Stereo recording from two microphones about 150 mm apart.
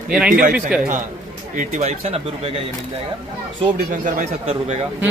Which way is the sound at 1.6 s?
50° right (ahead or behind).